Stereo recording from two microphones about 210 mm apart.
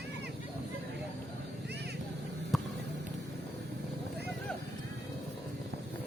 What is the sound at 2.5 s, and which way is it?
Vehicle, centre (ahead or behind).